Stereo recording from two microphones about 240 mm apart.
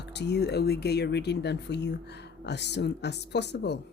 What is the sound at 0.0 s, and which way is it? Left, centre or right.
Speech, left.